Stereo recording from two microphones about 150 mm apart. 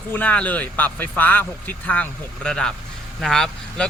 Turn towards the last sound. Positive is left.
turn(degrees=5)  # may be behind; listen again after turning